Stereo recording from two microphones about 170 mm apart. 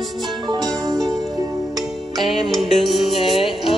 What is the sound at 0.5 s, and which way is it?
Music, 25° right (ahead or behind).